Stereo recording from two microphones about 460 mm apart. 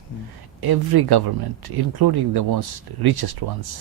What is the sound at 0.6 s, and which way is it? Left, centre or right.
Speech, right.